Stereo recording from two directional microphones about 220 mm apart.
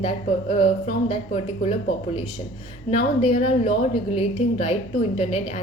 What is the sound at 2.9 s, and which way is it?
A woman's voice, 30° left (ahead or behind).